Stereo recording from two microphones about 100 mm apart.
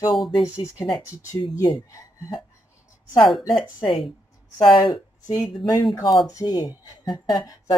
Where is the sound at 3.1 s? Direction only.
55° left (ahead or behind).